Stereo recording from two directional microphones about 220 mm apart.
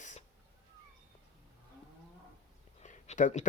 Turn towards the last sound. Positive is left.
turn(degrees=35)  # may be behind; listen again after turning